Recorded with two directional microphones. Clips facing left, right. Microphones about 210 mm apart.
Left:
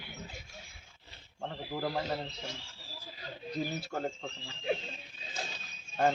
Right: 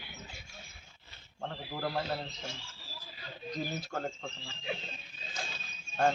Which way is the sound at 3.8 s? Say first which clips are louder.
Left 1 dB; 10° left (ahead or behind).